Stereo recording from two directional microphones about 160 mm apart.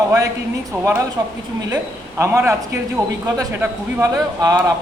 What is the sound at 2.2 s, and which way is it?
A man's voice, 15° right (ahead or behind).